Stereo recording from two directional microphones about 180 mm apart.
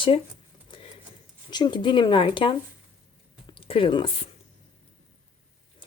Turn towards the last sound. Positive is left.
turn(degrees=30)  # may be behind; listen again after turning